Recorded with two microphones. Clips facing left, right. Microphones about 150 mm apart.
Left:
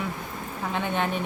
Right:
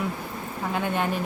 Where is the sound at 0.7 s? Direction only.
5° right (ahead or behind).